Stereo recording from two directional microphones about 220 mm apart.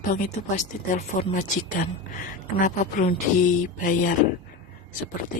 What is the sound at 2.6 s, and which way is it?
Speech, 35° left (ahead or behind).